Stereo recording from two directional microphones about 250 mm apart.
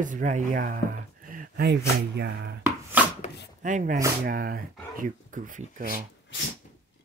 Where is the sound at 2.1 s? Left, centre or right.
Right.